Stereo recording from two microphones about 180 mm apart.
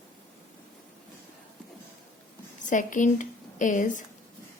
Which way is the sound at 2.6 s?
45° left (ahead or behind).